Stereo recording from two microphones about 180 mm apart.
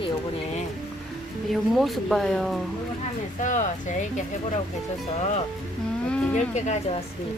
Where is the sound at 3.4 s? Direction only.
45° left (ahead or behind).